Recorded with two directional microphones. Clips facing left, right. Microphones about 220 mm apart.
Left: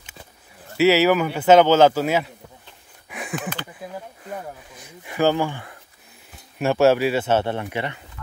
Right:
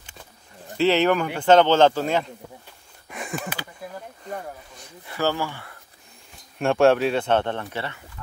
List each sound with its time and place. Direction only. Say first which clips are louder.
0.7 s speech: left 3 dB; 5° left (ahead or behind)
3.1 s a sound: left 1 dB; centre (ahead or behind)
5.0 s speech: left 5 dB; 15° left (ahead or behind)
6.6 s speech: left 1 dB; 5° left (ahead or behind)